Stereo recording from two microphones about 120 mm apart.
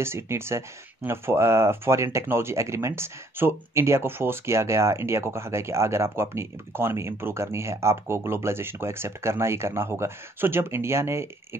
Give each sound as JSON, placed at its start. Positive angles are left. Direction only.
{"t": 0.0, "sound": "speech", "side_deg": -20}